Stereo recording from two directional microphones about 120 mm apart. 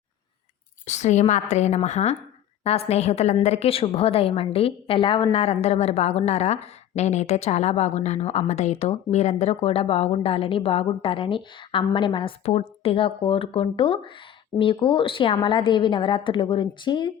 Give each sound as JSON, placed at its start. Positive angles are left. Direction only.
{"t": 0.9, "sound": "a woman's voice", "side_deg": 75}
{"t": 12.5, "sound": "a woman's voice", "side_deg": 60}